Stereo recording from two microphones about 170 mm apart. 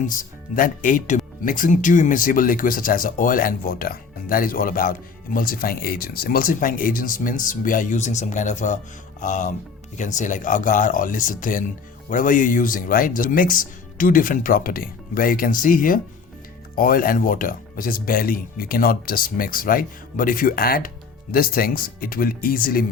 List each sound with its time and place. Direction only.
0.0 s speech: 50° left (ahead or behind)